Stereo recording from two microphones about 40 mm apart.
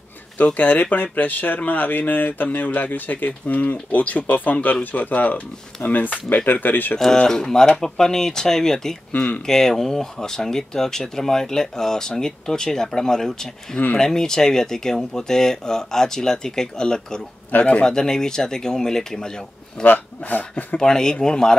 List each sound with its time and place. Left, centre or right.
0.6 s speech: left
7.1 s speech: centre
9.1 s speech: left
9.5 s speech: centre
17.5 s speech: left
17.8 s speech: centre
20.2 s speech: left
20.7 s speech: centre